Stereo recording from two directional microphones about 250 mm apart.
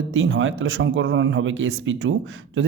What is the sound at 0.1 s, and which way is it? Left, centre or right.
Speech, right.